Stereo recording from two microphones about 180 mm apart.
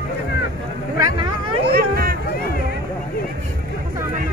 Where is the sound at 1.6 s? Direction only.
55° right (ahead or behind).